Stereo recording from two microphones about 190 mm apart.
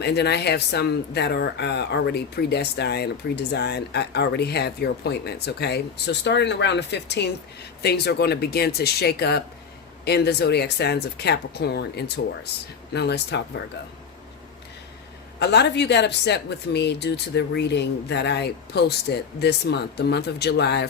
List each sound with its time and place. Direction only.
0.0 s speech: 60° left (ahead or behind)
15.4 s speech: 65° left (ahead or behind)